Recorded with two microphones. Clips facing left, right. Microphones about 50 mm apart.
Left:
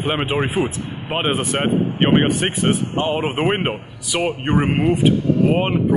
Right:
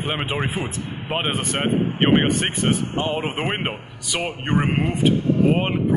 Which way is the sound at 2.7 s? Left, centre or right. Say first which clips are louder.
Left 3 dB; left.